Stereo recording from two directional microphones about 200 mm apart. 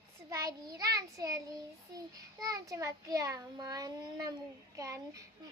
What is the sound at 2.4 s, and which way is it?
A child's voice, 15° right (ahead or behind).